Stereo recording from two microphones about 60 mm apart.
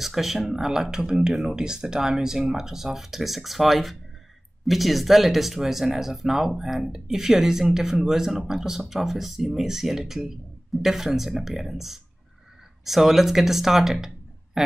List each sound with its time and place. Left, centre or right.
0.0 s speech: centre